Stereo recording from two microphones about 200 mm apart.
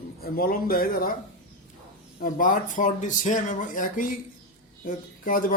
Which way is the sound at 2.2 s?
45° left (ahead or behind).